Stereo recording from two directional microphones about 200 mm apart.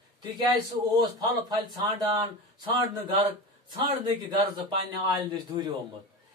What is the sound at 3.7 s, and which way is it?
Speech, 20° right (ahead or behind).